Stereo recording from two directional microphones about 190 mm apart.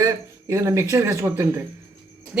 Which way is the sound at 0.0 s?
15° right (ahead or behind).